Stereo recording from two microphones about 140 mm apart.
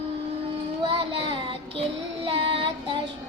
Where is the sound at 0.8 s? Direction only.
40° right (ahead or behind).